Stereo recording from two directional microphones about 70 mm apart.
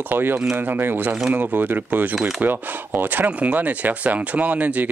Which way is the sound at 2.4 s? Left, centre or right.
Right.